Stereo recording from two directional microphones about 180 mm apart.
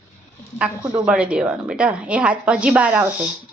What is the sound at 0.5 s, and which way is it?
A woman's voice, 5° right (ahead or behind).